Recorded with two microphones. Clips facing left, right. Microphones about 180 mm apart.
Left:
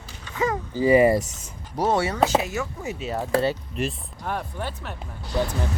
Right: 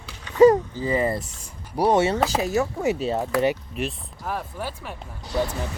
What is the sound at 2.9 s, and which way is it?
Speech, 90° right.